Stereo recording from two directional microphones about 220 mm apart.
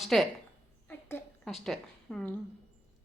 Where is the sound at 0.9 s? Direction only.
10° left (ahead or behind).